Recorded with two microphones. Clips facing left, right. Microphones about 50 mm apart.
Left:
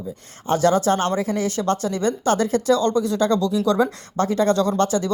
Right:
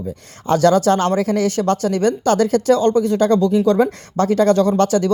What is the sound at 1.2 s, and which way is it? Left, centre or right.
Speech, right.